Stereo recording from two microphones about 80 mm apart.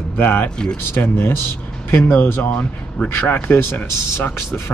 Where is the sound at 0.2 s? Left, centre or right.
Left.